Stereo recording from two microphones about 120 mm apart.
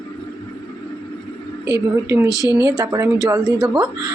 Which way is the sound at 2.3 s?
30° left (ahead or behind).